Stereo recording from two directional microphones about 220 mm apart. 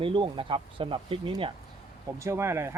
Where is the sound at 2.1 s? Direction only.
10° right (ahead or behind).